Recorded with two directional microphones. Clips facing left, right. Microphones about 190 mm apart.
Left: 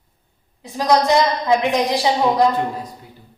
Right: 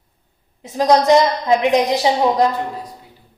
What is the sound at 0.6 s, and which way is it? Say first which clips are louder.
Speech: right 2 dB; 20° right (ahead or behind).